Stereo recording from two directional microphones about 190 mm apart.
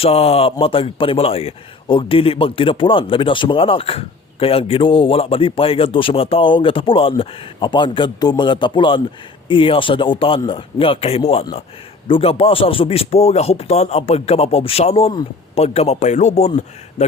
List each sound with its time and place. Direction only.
0.0 s a man's voice: 30° left (ahead or behind)